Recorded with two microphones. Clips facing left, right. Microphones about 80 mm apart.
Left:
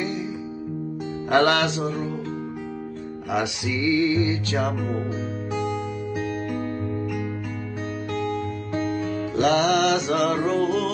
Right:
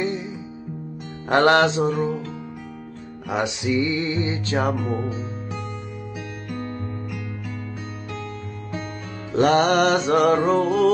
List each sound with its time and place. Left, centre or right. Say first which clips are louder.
1.3 s music: right 3 dB; right
3.3 s music: right 2 dB; right
9.3 s music: right 3 dB; right